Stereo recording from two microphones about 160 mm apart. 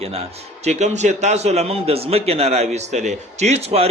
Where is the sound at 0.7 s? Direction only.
45° right (ahead or behind).